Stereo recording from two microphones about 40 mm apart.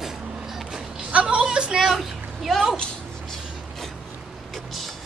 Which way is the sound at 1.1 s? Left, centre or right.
Right.